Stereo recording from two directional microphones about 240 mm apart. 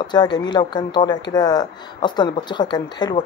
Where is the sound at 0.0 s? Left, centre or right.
Centre.